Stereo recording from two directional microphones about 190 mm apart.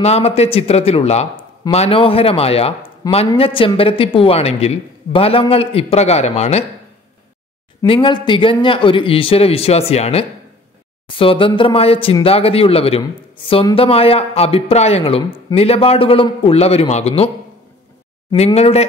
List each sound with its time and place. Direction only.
0.0 s speech: 35° left (ahead or behind)
7.8 s speech: 25° left (ahead or behind)
18.3 s speech: 35° left (ahead or behind)